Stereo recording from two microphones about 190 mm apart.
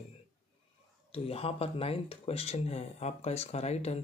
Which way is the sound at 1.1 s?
30° left (ahead or behind).